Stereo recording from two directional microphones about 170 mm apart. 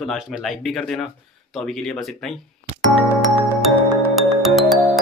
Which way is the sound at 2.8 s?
Centre (ahead or behind).